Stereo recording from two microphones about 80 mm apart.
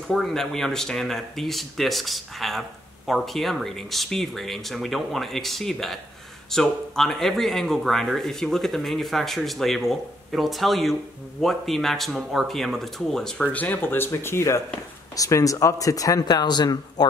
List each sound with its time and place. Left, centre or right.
0.1 s speech: centre
13.5 s speech: left
15.1 s speech: left